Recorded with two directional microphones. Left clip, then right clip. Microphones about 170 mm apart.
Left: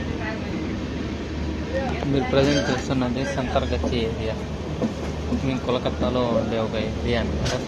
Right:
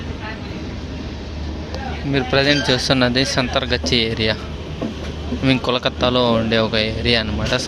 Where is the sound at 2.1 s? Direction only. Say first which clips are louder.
Right 5 dB; 20° right (ahead or behind).